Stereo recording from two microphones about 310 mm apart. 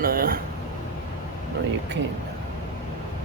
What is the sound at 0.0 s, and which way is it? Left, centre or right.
Vehicle, right.